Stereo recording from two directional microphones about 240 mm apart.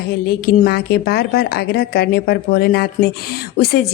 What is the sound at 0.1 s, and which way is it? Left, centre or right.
A woman's voice, left.